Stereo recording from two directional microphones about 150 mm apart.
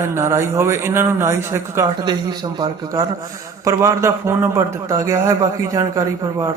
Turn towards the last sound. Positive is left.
turn(degrees=-20)  # may be behind; listen again after turning